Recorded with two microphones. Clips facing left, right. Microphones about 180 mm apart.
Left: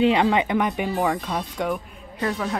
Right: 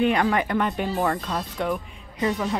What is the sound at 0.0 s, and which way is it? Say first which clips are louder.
Speech: left 2 dB; 20° left (ahead or behind).